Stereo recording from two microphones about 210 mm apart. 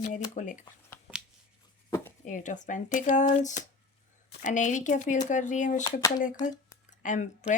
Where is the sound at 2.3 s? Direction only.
35° left (ahead or behind).